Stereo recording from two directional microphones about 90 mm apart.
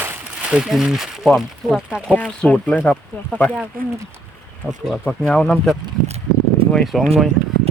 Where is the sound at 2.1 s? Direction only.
15° left (ahead or behind).